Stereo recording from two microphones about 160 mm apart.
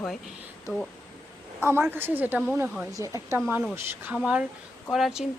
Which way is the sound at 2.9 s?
20° right (ahead or behind).